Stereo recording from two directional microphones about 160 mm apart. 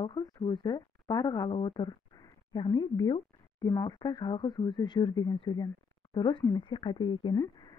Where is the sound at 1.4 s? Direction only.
30° left (ahead or behind).